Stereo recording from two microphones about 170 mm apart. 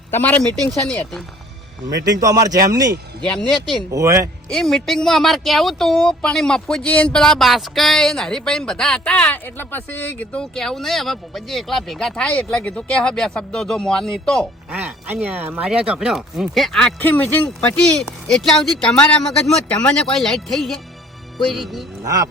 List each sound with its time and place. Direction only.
0.1 s speech: 10° left (ahead or behind)
2.0 s a man's voice: 20° right (ahead or behind)
3.2 s speech: 5° left (ahead or behind)
3.9 s speech: 20° right (ahead or behind)
4.4 s speech: 5° left (ahead or behind)
14.7 s speech: 10° right (ahead or behind)
22.0 s speech: 20° right (ahead or behind)